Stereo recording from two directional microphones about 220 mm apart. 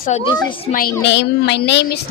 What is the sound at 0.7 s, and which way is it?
A woman's voice, 45° left (ahead or behind).